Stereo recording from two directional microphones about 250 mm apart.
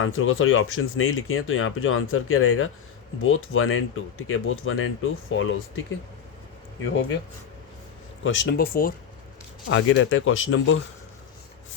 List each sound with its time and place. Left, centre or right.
0.0 s speech: left
6.8 s speech: left
8.2 s speech: left
9.6 s speech: left